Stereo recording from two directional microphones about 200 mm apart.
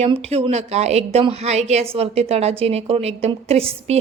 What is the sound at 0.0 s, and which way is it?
A woman's voice, 30° right (ahead or behind).